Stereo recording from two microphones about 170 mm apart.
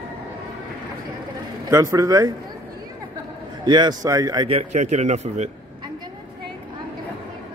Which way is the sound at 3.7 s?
25° right (ahead or behind).